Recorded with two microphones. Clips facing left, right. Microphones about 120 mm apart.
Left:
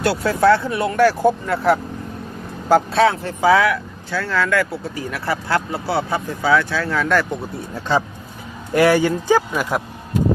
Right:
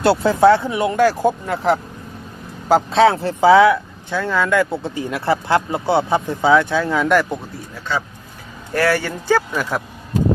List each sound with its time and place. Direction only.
0.0 s speech: 25° right (ahead or behind)
2.9 s speech: 30° right (ahead or behind)
8.7 s speech: 15° left (ahead or behind)